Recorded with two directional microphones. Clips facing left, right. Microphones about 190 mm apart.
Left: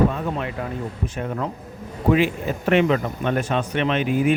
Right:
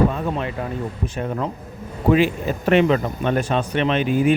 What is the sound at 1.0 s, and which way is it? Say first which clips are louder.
Speech: right 1 dB; 30° right (ahead or behind).